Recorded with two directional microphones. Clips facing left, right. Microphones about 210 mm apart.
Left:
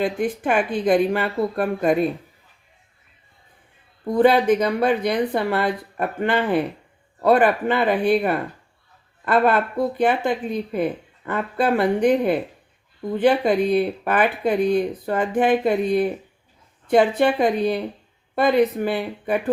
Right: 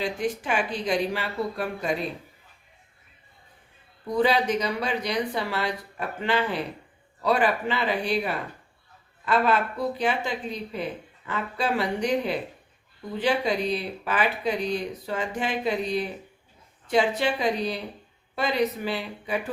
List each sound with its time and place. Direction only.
0.0 s speech: 55° left (ahead or behind)
4.0 s speech: 55° left (ahead or behind)